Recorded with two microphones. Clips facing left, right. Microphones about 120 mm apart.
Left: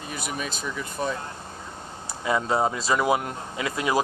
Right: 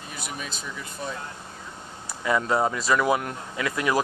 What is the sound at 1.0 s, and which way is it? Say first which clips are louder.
Speech: left 6 dB; 60° left (ahead or behind).